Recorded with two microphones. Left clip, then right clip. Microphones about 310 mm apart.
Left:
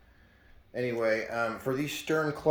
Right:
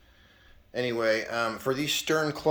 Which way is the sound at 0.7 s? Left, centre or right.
Centre.